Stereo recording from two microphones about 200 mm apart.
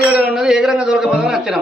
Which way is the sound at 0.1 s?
5° right (ahead or behind).